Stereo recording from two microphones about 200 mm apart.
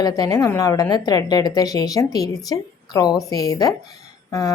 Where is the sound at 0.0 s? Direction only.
20° left (ahead or behind).